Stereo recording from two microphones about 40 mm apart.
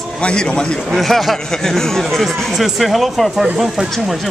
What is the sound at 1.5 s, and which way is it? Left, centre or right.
A man's voice, centre.